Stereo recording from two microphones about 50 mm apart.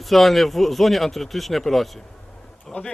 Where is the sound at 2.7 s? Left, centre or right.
Left.